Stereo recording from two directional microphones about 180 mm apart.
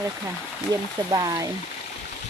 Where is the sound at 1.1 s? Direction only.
20° right (ahead or behind).